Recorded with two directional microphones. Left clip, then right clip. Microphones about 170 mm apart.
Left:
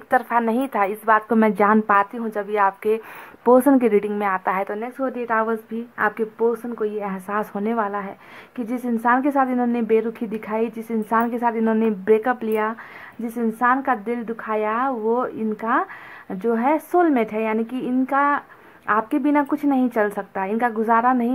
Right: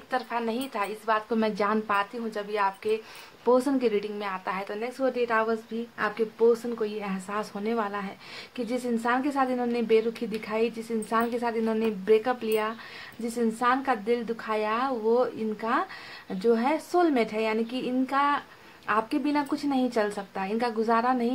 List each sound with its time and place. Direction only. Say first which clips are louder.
0.1 s a woman's voice: left 10 dB; 40° left (ahead or behind)